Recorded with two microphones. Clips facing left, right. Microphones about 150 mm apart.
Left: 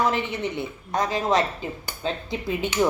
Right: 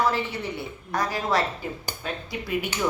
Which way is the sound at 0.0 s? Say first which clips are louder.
Left 1 dB; 20° left (ahead or behind).